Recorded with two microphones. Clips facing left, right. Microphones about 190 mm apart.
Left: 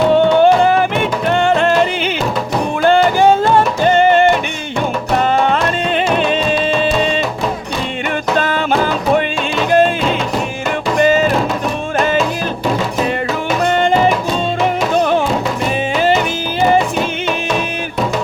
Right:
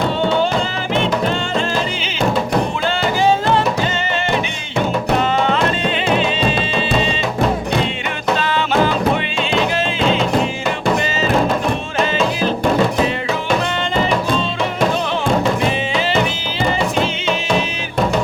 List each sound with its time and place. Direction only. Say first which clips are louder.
0.1 s music: left 7 dB; 55° left (ahead or behind)
8.4 s music: left 3 dB; 50° left (ahead or behind)
9.7 s music: left 5 dB; 50° left (ahead or behind)
13.7 s music: left 6 dB; 50° left (ahead or behind)